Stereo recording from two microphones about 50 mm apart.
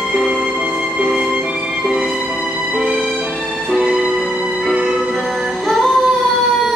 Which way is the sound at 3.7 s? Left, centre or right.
Centre.